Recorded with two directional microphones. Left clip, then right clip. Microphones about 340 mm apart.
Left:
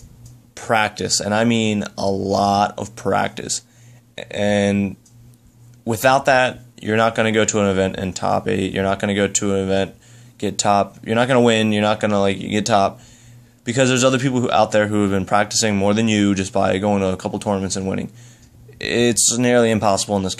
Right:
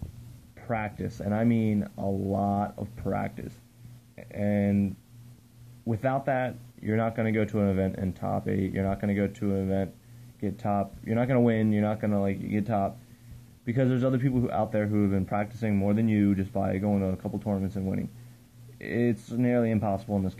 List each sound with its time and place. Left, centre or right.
0.6 s speech: centre
2.0 s speech: left
2.3 s speech: centre
8.5 s speech: left
8.7 s speech: centre